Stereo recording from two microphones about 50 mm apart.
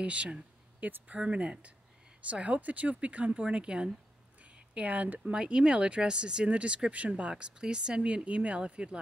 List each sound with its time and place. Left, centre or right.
0.0 s speech: right